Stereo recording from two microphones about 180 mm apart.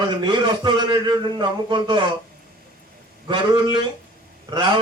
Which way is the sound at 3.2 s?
25° right (ahead or behind).